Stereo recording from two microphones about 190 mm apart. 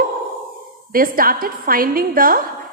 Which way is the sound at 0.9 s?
50° right (ahead or behind).